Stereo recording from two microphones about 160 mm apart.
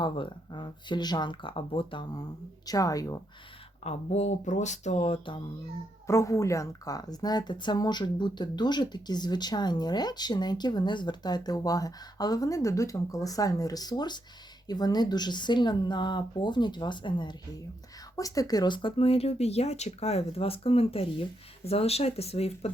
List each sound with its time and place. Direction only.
0.0 s speech: 30° left (ahead or behind)
3.8 s speech: 45° left (ahead or behind)
6.1 s speech: 20° left (ahead or behind); by 22.7 s 40° left (ahead or behind)